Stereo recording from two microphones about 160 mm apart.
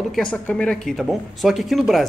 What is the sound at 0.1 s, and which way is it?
Speech, 5° left (ahead or behind).